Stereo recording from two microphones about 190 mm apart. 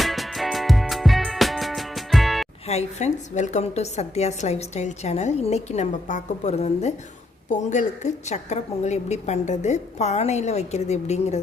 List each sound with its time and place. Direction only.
0.0 s music: centre (ahead or behind)
2.6 s a woman's voice: 35° left (ahead or behind)